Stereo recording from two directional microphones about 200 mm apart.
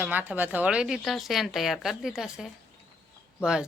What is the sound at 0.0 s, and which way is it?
Speech, 10° right (ahead or behind).